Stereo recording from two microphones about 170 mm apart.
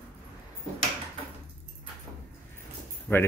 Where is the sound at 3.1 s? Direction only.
10° left (ahead or behind).